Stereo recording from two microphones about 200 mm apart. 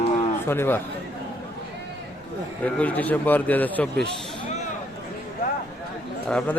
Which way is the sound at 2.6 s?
5° left (ahead or behind).